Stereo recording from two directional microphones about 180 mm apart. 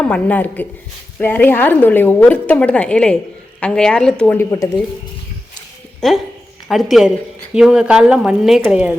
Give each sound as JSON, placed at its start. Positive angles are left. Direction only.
{"t": 0.0, "sound": "a woman's voice", "side_deg": 5}
{"t": 6.0, "sound": "speech", "side_deg": 0}